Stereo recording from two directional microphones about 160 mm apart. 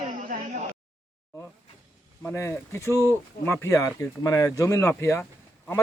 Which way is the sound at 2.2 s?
15° left (ahead or behind).